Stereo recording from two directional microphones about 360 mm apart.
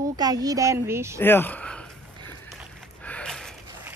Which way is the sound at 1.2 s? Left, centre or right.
Centre.